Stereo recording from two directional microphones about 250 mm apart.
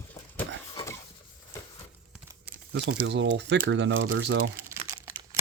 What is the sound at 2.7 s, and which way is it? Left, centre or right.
Speech, right.